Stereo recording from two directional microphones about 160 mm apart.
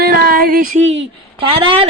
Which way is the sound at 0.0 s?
70° right (ahead or behind).